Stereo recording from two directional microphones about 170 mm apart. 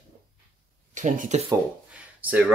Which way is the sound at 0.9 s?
50° right (ahead or behind).